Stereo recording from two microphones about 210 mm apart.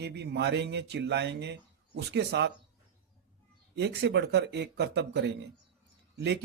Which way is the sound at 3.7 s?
55° right (ahead or behind).